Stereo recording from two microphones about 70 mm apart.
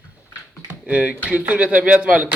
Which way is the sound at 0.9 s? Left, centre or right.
Centre.